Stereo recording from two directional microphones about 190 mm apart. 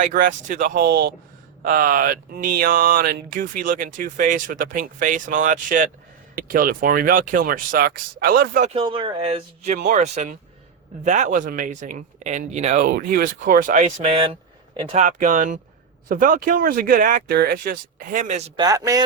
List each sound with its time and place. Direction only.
0.0 s speech: 45° right (ahead or behind)
8.7 s speech: 25° right (ahead or behind)
14.9 s speech: 40° right (ahead or behind)
18.5 s speech: 20° right (ahead or behind)